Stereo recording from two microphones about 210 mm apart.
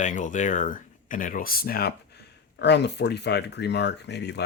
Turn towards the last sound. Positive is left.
turn(degrees=55)  # may be behind; listen again after turning